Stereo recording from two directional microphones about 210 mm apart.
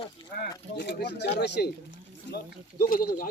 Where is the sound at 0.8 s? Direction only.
55° left (ahead or behind).